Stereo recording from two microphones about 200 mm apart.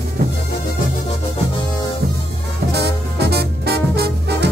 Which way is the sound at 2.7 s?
55° right (ahead or behind).